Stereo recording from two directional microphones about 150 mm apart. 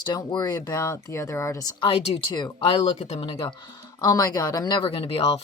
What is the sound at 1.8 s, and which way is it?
Speech, 40° left (ahead or behind).